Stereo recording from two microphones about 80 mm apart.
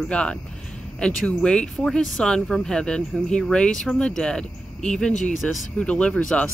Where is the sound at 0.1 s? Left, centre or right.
Centre.